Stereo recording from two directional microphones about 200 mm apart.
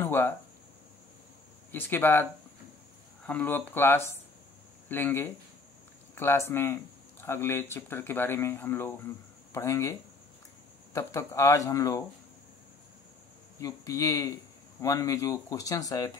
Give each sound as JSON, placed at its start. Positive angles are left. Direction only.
{"t": 0.0, "sound": "a sound", "side_deg": 10}
{"t": 1.7, "sound": "speech", "side_deg": 10}
{"t": 3.3, "sound": "speech", "side_deg": 10}
{"t": 13.6, "sound": "speech", "side_deg": 15}